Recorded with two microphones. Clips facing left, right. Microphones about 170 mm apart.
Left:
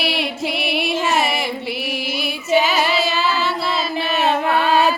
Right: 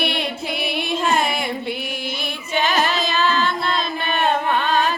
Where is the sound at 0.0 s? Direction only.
5° left (ahead or behind).